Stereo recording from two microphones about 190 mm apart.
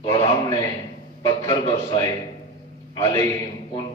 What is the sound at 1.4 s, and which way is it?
Speech, 25° left (ahead or behind).